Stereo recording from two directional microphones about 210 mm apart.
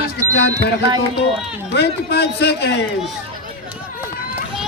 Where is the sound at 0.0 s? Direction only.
55° left (ahead or behind).